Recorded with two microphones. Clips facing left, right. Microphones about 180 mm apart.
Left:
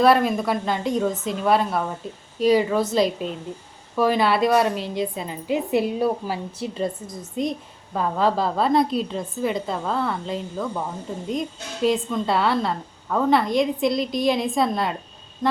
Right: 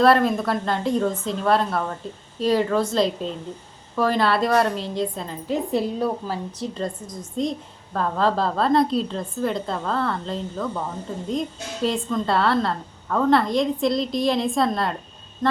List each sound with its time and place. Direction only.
0.0 s a woman's voice: 5° left (ahead or behind)
7.9 s a woman's voice: 5° left (ahead or behind)